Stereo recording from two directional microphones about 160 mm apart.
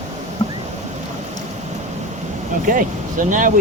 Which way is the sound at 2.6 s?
60° right (ahead or behind).